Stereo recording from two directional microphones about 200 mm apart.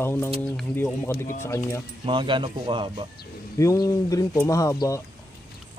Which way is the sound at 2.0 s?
25° right (ahead or behind).